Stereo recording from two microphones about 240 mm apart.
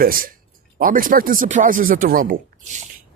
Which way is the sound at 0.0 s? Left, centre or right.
Right.